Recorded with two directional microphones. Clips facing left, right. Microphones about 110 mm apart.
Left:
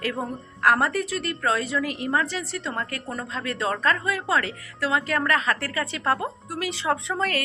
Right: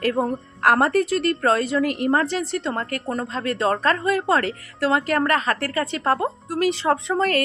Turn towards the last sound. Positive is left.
turn(degrees=-35)  # may be behind; listen again after turning